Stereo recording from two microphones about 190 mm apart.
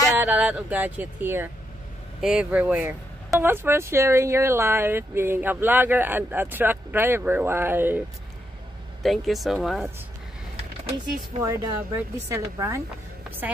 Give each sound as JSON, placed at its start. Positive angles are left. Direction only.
{"t": 0.1, "sound": "speech", "side_deg": -10}
{"t": 9.0, "sound": "speech", "side_deg": 0}
{"t": 11.4, "sound": "speech", "side_deg": -15}